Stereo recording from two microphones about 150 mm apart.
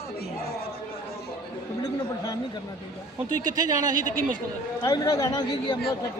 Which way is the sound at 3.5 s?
25° right (ahead or behind).